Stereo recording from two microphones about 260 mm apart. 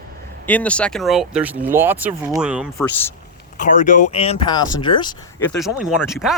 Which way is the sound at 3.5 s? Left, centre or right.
Left.